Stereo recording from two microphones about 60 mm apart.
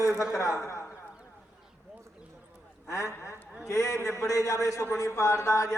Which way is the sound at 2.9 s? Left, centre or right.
Left.